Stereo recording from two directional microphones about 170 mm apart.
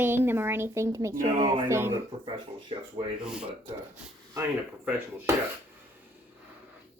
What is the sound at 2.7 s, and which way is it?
Speech, 30° right (ahead or behind).